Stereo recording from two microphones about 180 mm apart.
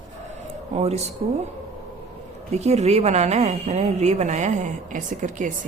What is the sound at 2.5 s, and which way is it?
A woman's voice, 40° right (ahead or behind).